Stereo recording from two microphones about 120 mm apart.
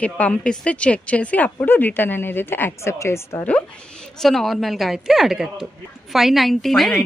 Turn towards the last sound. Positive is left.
turn(degrees=0)  # may be behind; listen again after turning